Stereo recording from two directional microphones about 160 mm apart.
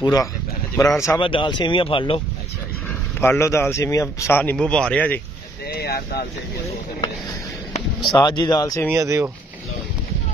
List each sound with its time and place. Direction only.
0.0 s speech: 25° left (ahead or behind)
1.2 s speech: 35° left (ahead or behind)
3.2 s speech: 15° left (ahead or behind)
5.7 s vehicle: 75° left (ahead or behind)
8.1 s speech: 25° left (ahead or behind)
8.9 s speech: 20° right (ahead or behind)